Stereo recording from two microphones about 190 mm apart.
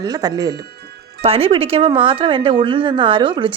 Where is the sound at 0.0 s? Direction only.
20° right (ahead or behind).